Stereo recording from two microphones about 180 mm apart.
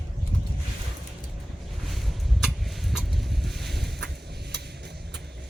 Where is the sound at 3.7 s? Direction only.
65° right (ahead or behind).